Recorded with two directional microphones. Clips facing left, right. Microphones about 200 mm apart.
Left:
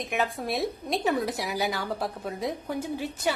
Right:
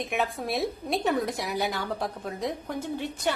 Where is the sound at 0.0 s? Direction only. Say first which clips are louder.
Even; centre (ahead or behind).